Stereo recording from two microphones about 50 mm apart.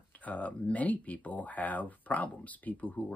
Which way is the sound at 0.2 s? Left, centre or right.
Left.